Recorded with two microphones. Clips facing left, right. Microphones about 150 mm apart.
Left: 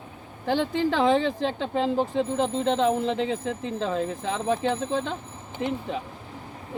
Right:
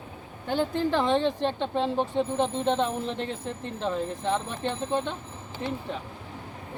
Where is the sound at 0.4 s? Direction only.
90° left.